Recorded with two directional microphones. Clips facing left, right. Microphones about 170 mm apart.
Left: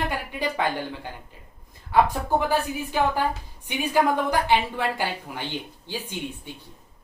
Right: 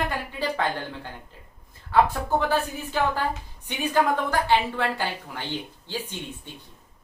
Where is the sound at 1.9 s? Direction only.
15° left (ahead or behind).